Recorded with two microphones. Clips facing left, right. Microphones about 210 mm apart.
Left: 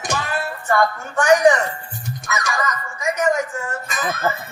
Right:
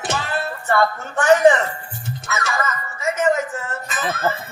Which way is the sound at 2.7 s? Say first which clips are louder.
Even; 15° left (ahead or behind).